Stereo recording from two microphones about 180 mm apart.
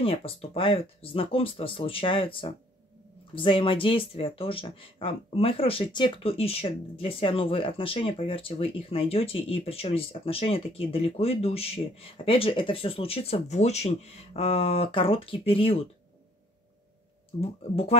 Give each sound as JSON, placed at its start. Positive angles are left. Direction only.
{"t": 0.0, "sound": "speech", "side_deg": 30}
{"t": 17.4, "sound": "speech", "side_deg": 35}